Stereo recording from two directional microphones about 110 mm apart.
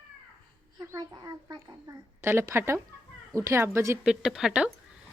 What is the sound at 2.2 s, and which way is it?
Speech, 20° right (ahead or behind).